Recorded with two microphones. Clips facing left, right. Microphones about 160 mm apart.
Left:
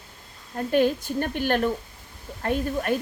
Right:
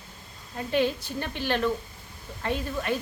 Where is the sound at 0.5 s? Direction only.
50° left (ahead or behind).